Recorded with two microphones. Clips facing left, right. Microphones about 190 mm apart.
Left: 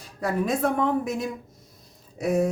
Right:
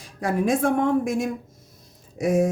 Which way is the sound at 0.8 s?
75° right (ahead or behind).